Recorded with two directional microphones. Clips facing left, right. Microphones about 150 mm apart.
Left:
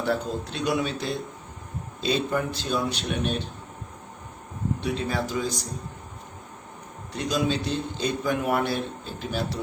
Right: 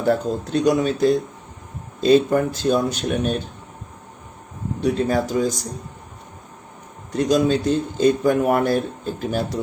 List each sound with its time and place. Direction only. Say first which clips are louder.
0.0 s speech: right 6 dB; 45° right (ahead or behind)
4.8 s speech: right 10 dB; 45° right (ahead or behind)
7.1 s speech: right 8 dB; 45° right (ahead or behind)